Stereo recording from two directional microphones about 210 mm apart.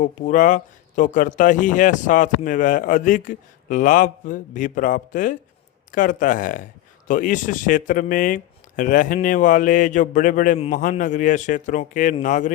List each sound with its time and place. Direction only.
0.0 s a man's voice: 35° left (ahead or behind)